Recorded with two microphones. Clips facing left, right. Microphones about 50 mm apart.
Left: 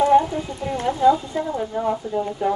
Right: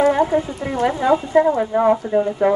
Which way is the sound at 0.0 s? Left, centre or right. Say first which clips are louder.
Right 1 dB; right.